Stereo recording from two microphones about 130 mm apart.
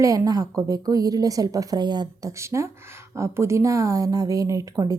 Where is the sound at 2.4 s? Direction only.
20° right (ahead or behind).